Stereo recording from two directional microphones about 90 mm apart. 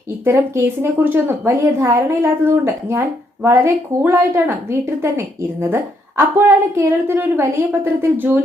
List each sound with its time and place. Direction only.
0.3 s a woman's voice: 25° right (ahead or behind)